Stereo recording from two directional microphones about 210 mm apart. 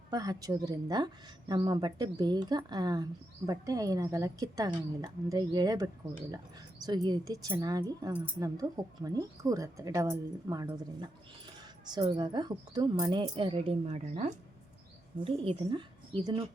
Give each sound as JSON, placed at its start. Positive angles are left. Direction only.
{"t": 0.1, "sound": "speech", "side_deg": -20}